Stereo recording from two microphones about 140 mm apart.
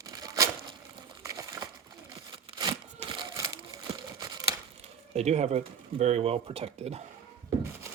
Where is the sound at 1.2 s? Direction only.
25° right (ahead or behind).